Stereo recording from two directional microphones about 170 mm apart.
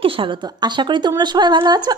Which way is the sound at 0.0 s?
30° right (ahead or behind).